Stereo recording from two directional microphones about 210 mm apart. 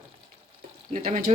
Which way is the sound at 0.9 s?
40° right (ahead or behind).